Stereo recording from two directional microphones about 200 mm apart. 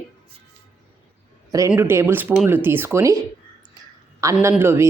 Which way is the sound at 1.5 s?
15° right (ahead or behind).